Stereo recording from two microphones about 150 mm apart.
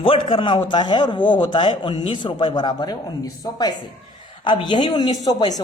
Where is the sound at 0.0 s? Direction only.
35° left (ahead or behind).